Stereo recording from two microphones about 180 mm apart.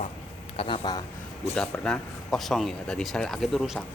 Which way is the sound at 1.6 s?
5° left (ahead or behind).